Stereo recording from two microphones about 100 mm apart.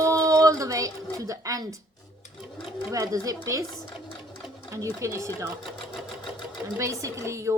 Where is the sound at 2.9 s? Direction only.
30° right (ahead or behind).